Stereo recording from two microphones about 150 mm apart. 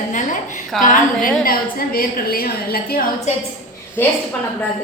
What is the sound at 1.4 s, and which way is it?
A woman's voice, 80° left.